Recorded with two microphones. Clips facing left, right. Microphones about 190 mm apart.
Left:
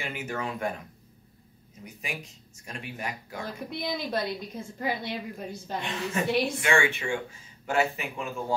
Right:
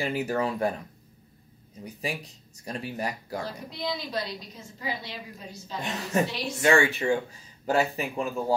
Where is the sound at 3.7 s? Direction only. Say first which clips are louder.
Left 2 dB; 55° left (ahead or behind).